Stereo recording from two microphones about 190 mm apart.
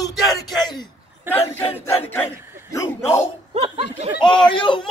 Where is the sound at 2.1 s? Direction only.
15° left (ahead or behind).